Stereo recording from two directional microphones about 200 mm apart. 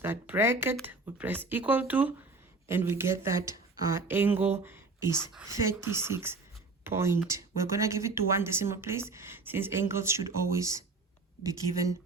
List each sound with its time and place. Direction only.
0.0 s speech: 10° right (ahead or behind)
5.2 s speech: centre (ahead or behind)
5.5 s speech: 15° right (ahead or behind)